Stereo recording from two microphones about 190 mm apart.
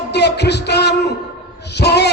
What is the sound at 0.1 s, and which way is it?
Music, 60° left (ahead or behind).